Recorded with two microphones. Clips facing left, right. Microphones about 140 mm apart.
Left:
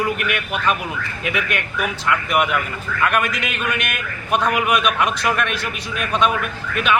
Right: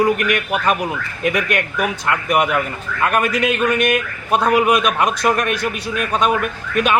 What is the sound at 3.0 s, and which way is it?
A man's voice, 35° right (ahead or behind).